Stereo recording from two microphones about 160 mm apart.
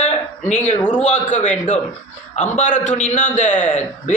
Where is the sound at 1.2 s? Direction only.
50° left (ahead or behind).